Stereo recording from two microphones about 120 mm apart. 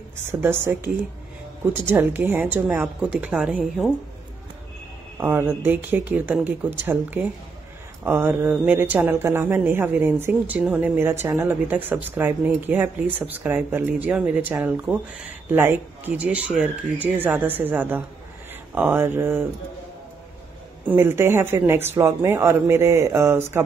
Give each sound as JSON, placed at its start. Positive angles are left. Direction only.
{"t": 0.3, "sound": "speech", "side_deg": -20}
{"t": 5.2, "sound": "speech", "side_deg": -20}
{"t": 20.8, "sound": "speech", "side_deg": -15}